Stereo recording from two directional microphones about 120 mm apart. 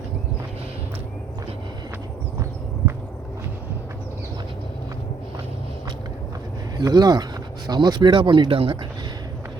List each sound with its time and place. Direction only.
6.7 s speech: 35° right (ahead or behind)